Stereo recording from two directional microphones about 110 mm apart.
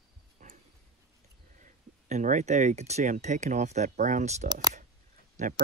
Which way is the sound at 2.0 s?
90° right.